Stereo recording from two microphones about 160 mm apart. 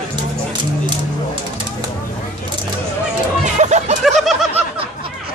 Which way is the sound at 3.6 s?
45° right (ahead or behind).